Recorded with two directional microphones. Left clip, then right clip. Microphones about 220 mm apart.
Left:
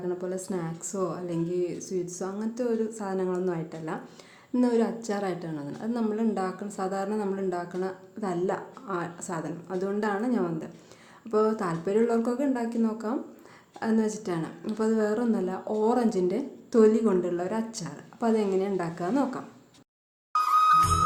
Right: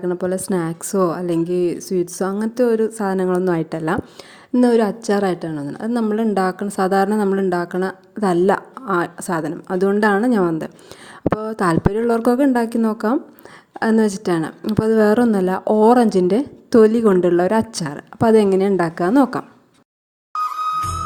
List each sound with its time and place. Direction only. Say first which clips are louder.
0.1 s a woman's voice: right 12 dB; 40° right (ahead or behind)
20.3 s music: left 1 dB; centre (ahead or behind)